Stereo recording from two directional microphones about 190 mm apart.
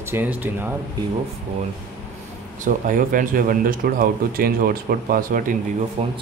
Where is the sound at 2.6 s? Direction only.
45° right (ahead or behind).